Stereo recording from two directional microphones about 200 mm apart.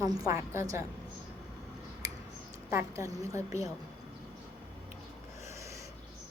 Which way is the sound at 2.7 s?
15° right (ahead or behind).